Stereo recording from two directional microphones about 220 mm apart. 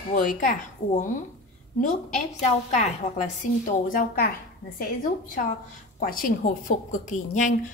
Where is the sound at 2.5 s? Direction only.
30° left (ahead or behind).